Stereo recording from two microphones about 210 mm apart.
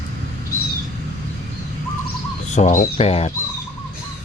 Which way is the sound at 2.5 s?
35° left (ahead or behind).